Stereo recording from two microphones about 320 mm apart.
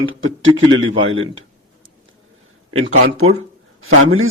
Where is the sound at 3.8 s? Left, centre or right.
Right.